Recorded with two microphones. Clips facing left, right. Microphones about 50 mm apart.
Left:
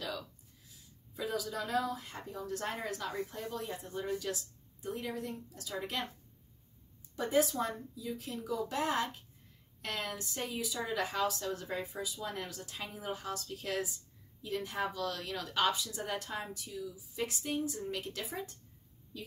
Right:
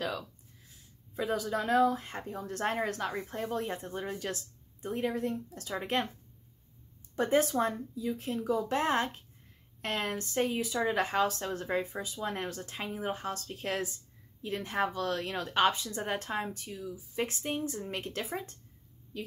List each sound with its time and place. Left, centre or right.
1.1 s a woman's voice: right
7.2 s a woman's voice: right